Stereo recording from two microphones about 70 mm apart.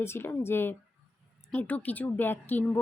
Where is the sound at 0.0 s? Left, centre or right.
Left.